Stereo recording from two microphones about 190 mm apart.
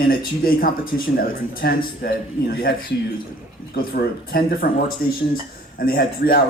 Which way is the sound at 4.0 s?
50° left (ahead or behind).